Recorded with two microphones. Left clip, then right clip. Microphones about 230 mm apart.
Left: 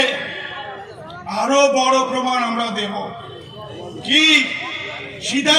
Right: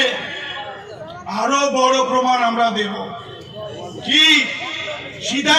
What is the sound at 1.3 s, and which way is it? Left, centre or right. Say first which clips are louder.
A man's voice: left 2 dB; left.